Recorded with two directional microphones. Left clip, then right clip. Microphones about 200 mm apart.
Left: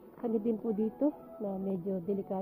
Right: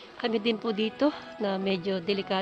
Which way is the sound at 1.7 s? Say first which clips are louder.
Right 7 dB; 20° right (ahead or behind).